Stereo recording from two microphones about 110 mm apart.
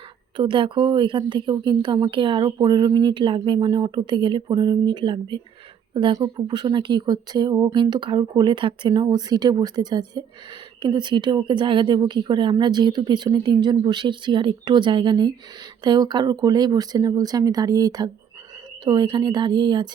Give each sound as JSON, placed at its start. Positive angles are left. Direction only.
{"t": 0.3, "sound": "speech", "side_deg": -50}